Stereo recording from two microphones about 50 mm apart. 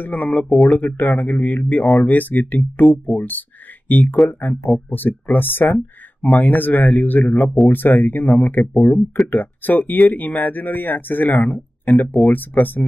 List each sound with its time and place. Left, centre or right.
0.0 s speech: left